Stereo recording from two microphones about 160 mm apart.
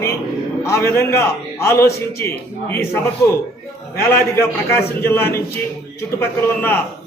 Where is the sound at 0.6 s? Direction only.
15° left (ahead or behind).